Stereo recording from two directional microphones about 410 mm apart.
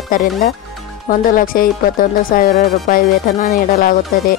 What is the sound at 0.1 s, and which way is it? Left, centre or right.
Speech, centre.